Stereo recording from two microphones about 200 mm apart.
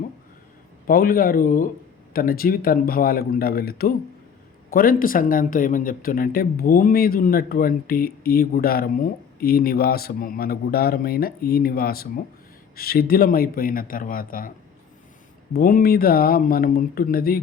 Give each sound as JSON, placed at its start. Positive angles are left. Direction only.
{"t": 0.9, "sound": "speech", "side_deg": 45}
{"t": 15.5, "sound": "speech", "side_deg": 45}